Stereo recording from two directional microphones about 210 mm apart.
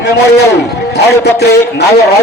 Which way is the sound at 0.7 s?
50° left (ahead or behind).